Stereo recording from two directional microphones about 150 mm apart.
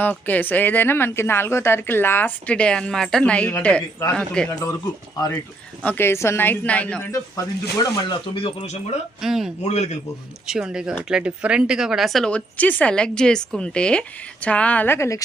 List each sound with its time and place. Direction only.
0.0 s a woman's voice: 10° left (ahead or behind)
4.6 s a woman's voice: 20° left (ahead or behind); by 8.8 s 45° left (ahead or behind)
9.2 s speech: centre (ahead or behind)
9.6 s a man's voice: 45° left (ahead or behind)
10.4 s a woman's voice: 5° right (ahead or behind); by 15.2 s 15° left (ahead or behind)